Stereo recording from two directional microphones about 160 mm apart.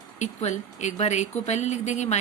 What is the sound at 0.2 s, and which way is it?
Speech, 45° left (ahead or behind).